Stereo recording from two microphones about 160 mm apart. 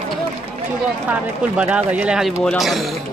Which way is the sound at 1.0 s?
5° right (ahead or behind).